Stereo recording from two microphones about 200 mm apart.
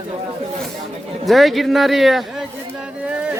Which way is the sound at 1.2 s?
Centre (ahead or behind).